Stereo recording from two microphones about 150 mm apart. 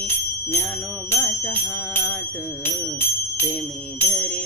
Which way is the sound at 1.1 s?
15° left (ahead or behind).